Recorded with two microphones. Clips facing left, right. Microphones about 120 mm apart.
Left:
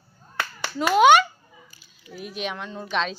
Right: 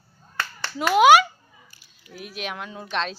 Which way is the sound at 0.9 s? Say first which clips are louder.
Right 1 dB; 5° right (ahead or behind).